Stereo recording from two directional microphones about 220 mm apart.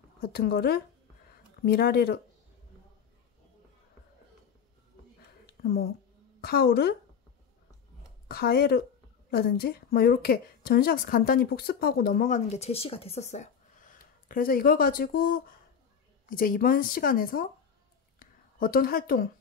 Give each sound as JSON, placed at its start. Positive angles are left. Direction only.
{"t": 0.2, "sound": "a woman's voice", "side_deg": 45}
{"t": 5.6, "sound": "a woman's voice", "side_deg": 45}
{"t": 8.3, "sound": "a woman's voice", "side_deg": 45}
{"t": 18.2, "sound": "a sound", "side_deg": 40}